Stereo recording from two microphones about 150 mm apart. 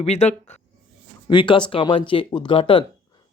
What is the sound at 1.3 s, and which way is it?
Speech, 30° left (ahead or behind).